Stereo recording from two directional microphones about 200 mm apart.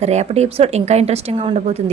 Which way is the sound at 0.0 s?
35° right (ahead or behind).